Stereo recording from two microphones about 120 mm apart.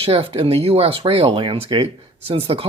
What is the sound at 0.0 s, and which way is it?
Speech, 55° right (ahead or behind).